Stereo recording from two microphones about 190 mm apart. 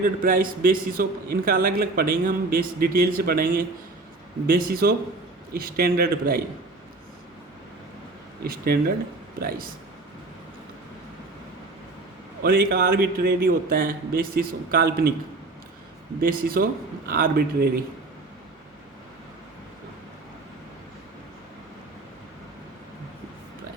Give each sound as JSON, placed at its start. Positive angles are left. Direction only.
{"t": 0.0, "sound": "a man's voice", "side_deg": -45}
{"t": 8.4, "sound": "a man's voice", "side_deg": -50}
{"t": 12.4, "sound": "a man's voice", "side_deg": -55}
{"t": 16.2, "sound": "a man's voice", "side_deg": -50}